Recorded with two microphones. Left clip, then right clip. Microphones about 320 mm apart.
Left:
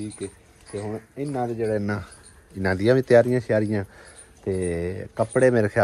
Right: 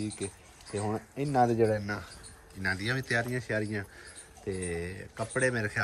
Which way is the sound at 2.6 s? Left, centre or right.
Centre.